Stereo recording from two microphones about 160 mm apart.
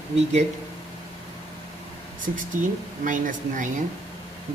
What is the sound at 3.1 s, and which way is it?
Speech, 55° right (ahead or behind).